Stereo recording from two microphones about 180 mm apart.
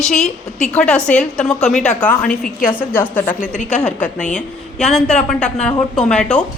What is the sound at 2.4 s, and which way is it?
Speech, 50° left (ahead or behind).